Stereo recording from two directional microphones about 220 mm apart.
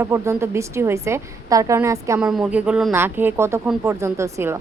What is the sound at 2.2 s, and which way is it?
Speech, 5° right (ahead or behind).